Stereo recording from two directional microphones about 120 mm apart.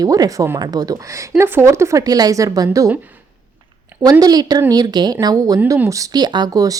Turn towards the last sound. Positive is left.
turn(degrees=-30)  # may be behind; listen again after turning